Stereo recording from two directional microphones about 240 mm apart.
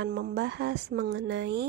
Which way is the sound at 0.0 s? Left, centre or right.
Right.